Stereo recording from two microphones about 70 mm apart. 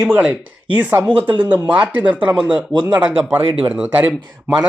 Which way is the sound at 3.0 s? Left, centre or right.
Right.